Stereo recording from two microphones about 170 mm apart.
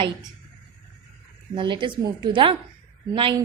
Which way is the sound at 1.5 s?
30° right (ahead or behind).